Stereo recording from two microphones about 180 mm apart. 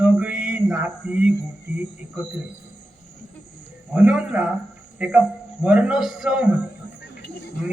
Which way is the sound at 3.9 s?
5° right (ahead or behind).